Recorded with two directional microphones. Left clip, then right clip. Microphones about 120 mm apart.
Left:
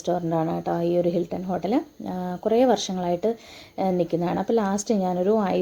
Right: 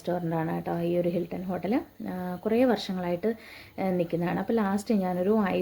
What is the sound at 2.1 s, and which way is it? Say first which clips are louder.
A woman's voice: left 5 dB; centre (ahead or behind).